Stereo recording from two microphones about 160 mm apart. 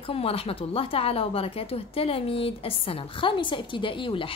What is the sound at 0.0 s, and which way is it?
A woman's voice, 35° left (ahead or behind).